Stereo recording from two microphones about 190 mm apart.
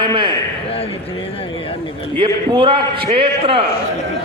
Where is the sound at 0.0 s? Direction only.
25° right (ahead or behind).